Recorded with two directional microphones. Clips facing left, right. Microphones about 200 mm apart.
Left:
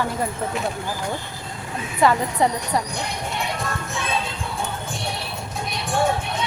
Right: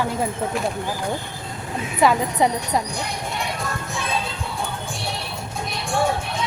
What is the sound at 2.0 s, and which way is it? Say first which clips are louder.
Speech: even; 15° right (ahead or behind).